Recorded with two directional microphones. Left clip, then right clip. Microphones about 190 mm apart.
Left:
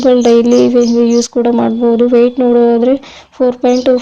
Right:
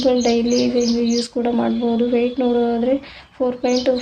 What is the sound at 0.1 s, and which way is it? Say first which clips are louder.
A woman's voice: left 12 dB; 40° left (ahead or behind).